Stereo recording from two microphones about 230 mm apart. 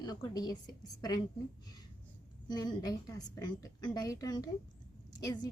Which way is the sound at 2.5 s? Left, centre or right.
Centre.